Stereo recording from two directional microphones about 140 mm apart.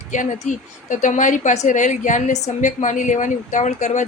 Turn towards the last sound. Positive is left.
turn(degrees=60)  # may be behind; listen again after turning